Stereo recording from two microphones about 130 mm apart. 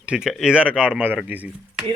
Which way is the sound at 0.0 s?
5° right (ahead or behind).